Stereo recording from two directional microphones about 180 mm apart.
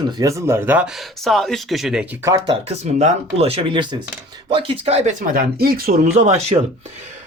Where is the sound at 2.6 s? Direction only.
40° right (ahead or behind); by 5.9 s 55° right (ahead or behind).